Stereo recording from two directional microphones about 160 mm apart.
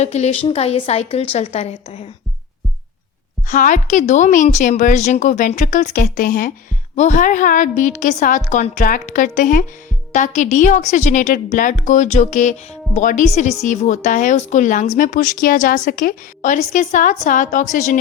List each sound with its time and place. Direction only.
0.0 s speech: 45° left (ahead or behind)
3.5 s speech: 50° left (ahead or behind)
6.9 s speech: 50° left (ahead or behind)